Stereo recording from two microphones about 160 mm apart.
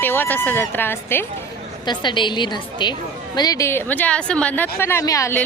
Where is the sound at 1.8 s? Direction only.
30° left (ahead or behind).